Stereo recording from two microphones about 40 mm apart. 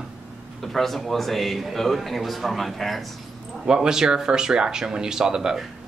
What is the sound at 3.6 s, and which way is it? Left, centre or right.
Speech, centre.